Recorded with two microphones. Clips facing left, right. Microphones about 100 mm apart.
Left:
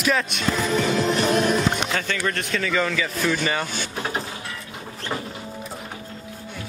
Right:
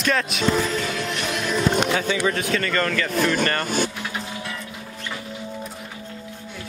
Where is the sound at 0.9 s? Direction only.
35° left (ahead or behind).